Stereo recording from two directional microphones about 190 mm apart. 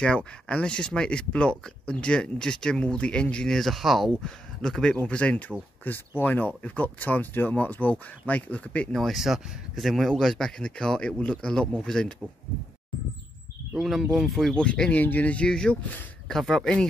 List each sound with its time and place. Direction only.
0.0 s speech: 5° left (ahead or behind)
13.7 s speech: centre (ahead or behind)